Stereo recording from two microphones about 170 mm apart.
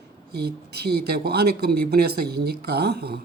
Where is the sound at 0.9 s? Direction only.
70° right (ahead or behind).